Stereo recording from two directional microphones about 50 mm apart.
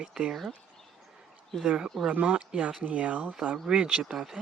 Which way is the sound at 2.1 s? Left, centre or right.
Right.